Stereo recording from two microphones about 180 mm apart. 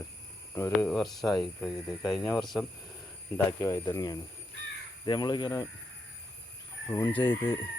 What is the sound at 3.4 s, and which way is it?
Speech, 20° left (ahead or behind).